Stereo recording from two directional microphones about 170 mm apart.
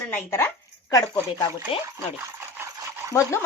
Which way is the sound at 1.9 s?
15° right (ahead or behind).